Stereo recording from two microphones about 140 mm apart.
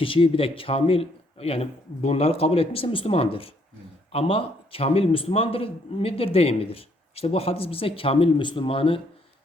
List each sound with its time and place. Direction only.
0.0 s a man's voice: 40° left (ahead or behind)